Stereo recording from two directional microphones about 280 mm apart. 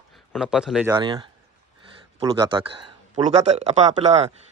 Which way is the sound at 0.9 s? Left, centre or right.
Centre.